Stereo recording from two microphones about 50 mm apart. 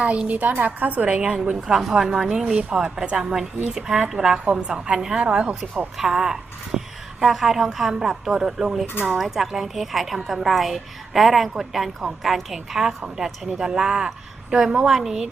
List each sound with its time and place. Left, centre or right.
0.0 s a woman's voice: right
1.0 s a woman's voice: centre
3.2 s a woman's voice: centre
5.2 s a woman's voice: right
6.0 s a woman's voice: centre